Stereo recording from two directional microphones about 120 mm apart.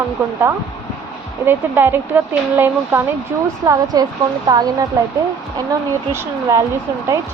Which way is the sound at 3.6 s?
25° right (ahead or behind).